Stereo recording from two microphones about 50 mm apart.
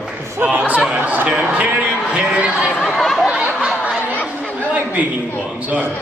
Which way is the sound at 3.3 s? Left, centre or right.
Right.